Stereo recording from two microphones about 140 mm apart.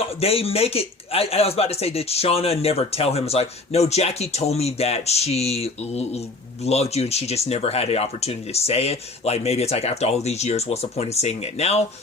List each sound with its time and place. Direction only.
0.2 s speech: 45° left (ahead or behind)